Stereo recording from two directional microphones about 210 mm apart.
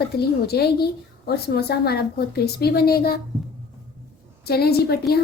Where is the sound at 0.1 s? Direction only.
50° left (ahead or behind).